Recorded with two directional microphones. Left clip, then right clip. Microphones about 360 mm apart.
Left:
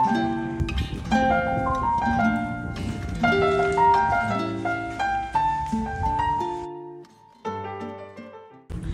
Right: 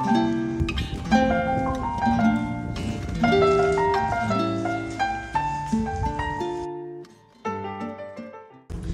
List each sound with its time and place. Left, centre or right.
0.0 s music: centre